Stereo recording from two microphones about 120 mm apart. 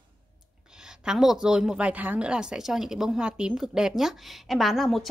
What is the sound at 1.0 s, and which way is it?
A woman's voice, 5° right (ahead or behind).